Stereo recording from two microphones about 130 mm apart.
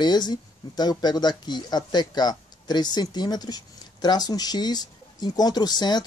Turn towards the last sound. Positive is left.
turn(degrees=30)  # may be behind; listen again after turning